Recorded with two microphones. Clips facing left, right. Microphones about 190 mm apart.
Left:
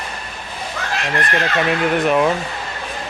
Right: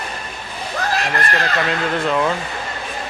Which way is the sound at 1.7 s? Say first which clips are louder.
Left 3 dB; 20° left (ahead or behind).